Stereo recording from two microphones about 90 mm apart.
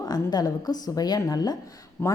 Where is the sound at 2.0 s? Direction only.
25° left (ahead or behind).